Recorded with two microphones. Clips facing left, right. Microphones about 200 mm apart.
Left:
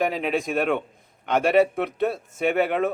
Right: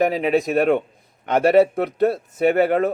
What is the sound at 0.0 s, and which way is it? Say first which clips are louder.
A man's voice: right 6 dB; 45° right (ahead or behind).